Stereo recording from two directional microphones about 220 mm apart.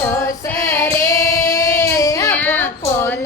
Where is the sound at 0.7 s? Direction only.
15° left (ahead or behind).